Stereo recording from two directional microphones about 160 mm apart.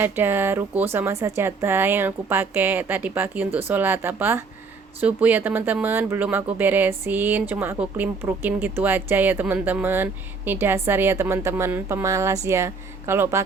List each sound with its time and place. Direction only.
0.0 s speech: 15° right (ahead or behind)